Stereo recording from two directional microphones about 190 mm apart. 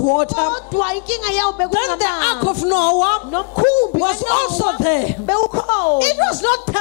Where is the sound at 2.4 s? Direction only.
40° left (ahead or behind).